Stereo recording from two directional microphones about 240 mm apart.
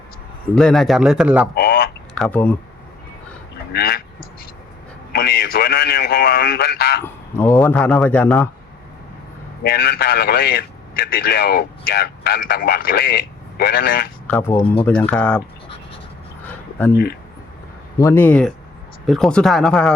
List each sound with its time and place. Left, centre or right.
0.5 s speech: centre
1.5 s a sound: left
2.1 s speech: centre
3.7 s duck: left
5.1 s a man's voice: left
7.0 s speech: centre
9.6 s a man's voice: left
14.3 s speech: centre
14.5 s speech: left
14.8 s speech: centre
16.5 s a sound: centre
18.0 s speech: centre